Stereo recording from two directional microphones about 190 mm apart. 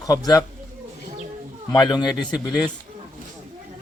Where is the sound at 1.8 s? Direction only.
20° left (ahead or behind).